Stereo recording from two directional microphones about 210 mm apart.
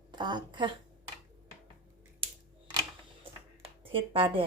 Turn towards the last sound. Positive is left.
turn(degrees=-25)  # may be behind; listen again after turning